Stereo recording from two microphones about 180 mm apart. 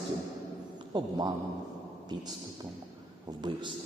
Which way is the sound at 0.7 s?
25° right (ahead or behind).